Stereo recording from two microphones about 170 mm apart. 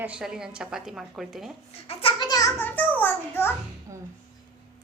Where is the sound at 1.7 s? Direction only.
35° left (ahead or behind).